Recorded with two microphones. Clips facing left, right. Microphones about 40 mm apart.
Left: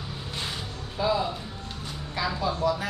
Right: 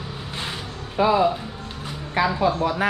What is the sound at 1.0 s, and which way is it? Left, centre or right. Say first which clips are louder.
Speech: right 8 dB; right.